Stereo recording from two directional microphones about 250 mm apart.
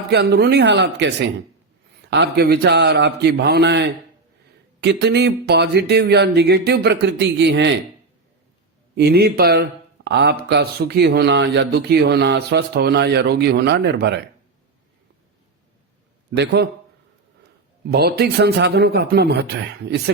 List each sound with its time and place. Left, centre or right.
0.1 s speech: right
9.0 s speech: right
16.3 s speech: right
17.9 s speech: right